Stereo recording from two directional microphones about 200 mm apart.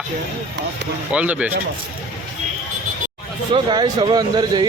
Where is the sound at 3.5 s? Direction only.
20° right (ahead or behind).